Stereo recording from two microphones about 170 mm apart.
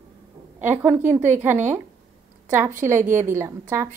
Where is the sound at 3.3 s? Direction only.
15° right (ahead or behind).